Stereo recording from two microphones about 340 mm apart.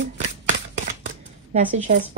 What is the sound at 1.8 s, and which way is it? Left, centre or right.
Speech, right.